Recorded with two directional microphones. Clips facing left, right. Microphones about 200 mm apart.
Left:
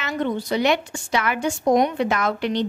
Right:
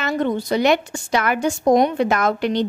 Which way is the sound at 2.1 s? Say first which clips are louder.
Right 3 dB; 45° right (ahead or behind).